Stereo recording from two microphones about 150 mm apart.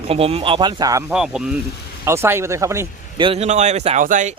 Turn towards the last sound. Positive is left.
turn(degrees=-55)  # may be behind; listen again after turning